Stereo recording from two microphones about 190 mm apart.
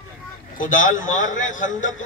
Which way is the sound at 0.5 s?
45° left (ahead or behind).